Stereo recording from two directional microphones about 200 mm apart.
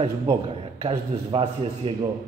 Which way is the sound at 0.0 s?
25° right (ahead or behind).